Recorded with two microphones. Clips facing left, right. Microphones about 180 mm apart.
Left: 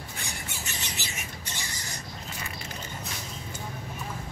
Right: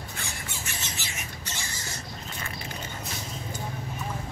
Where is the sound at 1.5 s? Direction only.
15° left (ahead or behind).